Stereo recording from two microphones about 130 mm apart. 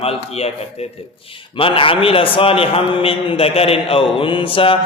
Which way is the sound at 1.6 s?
45° left (ahead or behind).